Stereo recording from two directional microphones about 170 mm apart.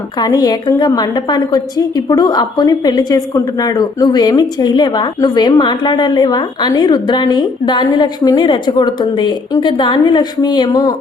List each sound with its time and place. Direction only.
0.2 s a woman's voice: 25° left (ahead or behind)